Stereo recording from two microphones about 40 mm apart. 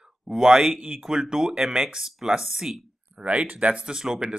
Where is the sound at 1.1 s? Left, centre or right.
Centre.